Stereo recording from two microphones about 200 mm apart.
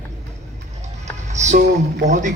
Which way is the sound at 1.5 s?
35° right (ahead or behind).